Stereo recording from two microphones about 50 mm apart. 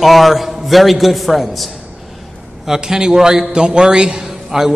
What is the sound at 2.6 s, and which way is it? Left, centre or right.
A man's voice, centre.